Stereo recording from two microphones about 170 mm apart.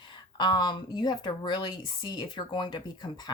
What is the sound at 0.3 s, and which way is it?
A woman's voice, 25° left (ahead or behind).